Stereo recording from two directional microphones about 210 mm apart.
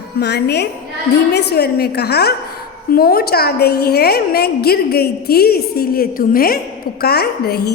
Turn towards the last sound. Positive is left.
turn(degrees=50)  # may be behind; listen again after turning